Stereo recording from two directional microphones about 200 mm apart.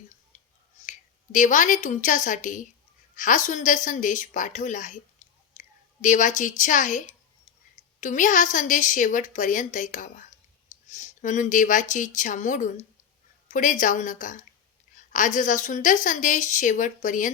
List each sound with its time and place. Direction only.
0.9 s a woman's voice: 40° left (ahead or behind)
5.2 s whispering: 35° left (ahead or behind)
5.5 s a sound: 40° left (ahead or behind)
6.6 s a woman's voice: 40° left (ahead or behind)